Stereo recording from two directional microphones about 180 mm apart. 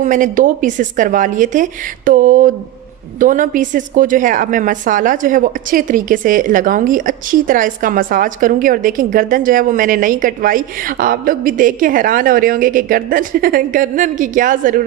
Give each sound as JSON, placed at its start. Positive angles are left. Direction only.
{"t": 0.0, "sound": "a woman's voice", "side_deg": -45}